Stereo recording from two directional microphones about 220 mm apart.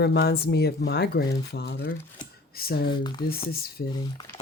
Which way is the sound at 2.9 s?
20° left (ahead or behind).